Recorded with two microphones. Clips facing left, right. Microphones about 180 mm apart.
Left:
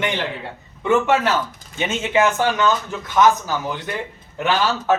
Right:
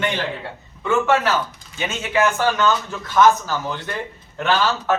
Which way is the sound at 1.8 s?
25° left (ahead or behind).